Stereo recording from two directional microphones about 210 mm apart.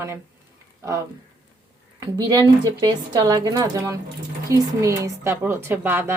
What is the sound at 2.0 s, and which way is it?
A woman's voice, 20° right (ahead or behind).